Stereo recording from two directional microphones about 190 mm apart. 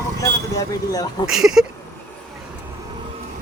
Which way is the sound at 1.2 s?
5° right (ahead or behind).